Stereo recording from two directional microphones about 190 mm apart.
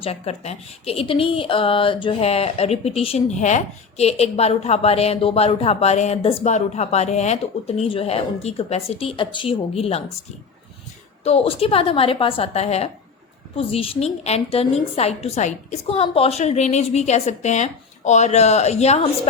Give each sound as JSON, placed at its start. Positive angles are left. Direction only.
{"t": 0.0, "sound": "a woman's voice", "side_deg": 35}
{"t": 11.2, "sound": "a woman's voice", "side_deg": 30}